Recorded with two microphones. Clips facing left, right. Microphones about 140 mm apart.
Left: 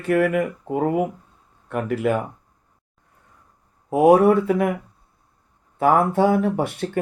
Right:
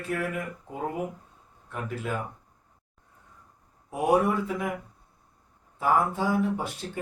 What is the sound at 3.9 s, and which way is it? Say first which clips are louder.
Speech: left 10 dB; 65° left (ahead or behind).